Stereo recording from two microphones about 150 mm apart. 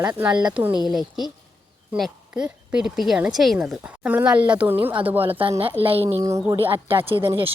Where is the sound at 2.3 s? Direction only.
5° right (ahead or behind).